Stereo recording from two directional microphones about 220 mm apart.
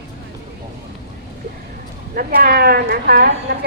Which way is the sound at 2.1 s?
40° right (ahead or behind).